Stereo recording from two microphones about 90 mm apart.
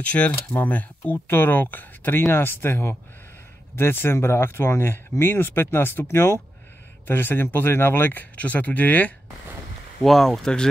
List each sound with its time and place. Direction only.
0.0 s speech: 15° left (ahead or behind)
10.0 s speech: 5° left (ahead or behind)